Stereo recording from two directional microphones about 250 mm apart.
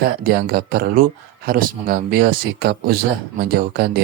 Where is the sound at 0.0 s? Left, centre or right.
Right.